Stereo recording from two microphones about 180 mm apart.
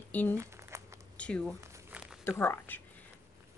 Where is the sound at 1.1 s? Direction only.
5° left (ahead or behind).